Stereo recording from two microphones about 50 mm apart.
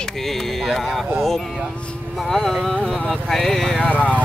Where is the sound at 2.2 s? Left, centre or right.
Centre.